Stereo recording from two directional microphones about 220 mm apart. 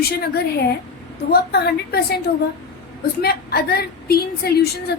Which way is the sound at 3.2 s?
45° left (ahead or behind).